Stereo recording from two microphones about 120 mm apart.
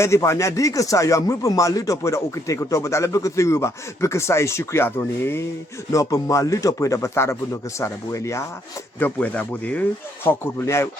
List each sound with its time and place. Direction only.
0.0 s speech: 25° left (ahead or behind)
9.0 s speech: 15° left (ahead or behind)